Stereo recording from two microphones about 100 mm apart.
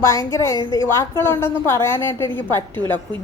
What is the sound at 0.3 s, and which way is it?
A woman's voice, 30° left (ahead or behind).